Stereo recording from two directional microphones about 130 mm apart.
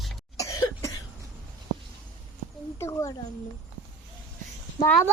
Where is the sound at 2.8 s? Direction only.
25° left (ahead or behind).